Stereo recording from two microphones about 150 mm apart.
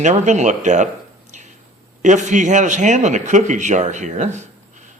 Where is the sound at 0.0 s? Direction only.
50° right (ahead or behind).